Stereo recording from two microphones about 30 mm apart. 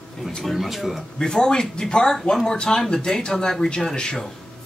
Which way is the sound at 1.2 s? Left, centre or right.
Left.